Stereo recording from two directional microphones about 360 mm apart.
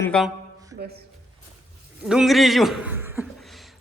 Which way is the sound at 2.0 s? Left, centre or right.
Centre.